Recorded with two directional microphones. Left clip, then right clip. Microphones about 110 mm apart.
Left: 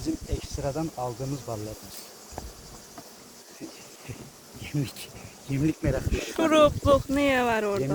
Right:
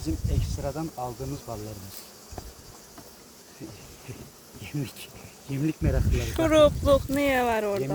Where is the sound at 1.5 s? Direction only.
65° left (ahead or behind).